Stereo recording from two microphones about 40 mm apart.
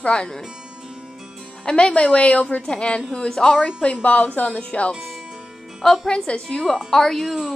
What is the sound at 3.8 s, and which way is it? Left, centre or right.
Speech, left.